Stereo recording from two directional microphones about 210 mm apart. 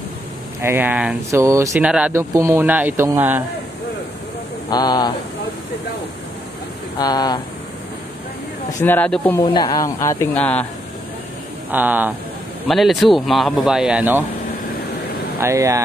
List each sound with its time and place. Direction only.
0.6 s speech: 10° right (ahead or behind)
4.6 s speech: 20° left (ahead or behind)
7.0 s speech: 20° left (ahead or behind)
8.8 s a woman's voice: 5° left (ahead or behind)
9.4 s a woman's voice: 20° left (ahead or behind)
11.7 s speech: 10° right (ahead or behind)
15.4 s speech: 15° right (ahead or behind)